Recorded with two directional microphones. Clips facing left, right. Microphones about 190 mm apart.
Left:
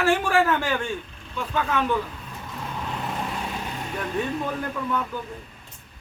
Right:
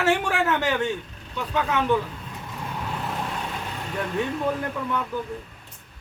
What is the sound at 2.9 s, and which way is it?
Vehicle, 5° left (ahead or behind).